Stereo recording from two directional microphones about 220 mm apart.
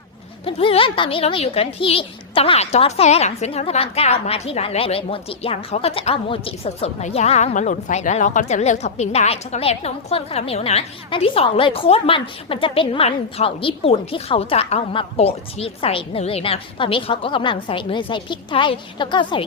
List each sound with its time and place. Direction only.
0.4 s speech: 25° left (ahead or behind)